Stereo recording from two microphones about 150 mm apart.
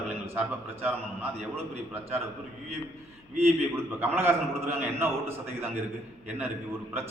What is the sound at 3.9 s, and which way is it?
Speech, 15° right (ahead or behind).